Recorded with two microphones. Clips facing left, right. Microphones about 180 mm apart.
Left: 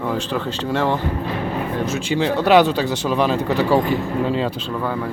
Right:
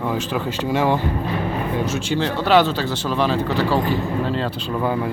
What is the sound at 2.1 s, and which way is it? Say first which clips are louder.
A man's voice: left 3 dB; 5° left (ahead or behind).